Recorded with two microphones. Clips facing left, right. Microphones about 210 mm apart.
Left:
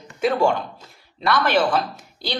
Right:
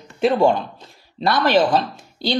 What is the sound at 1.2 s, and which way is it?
Speech, 25° right (ahead or behind).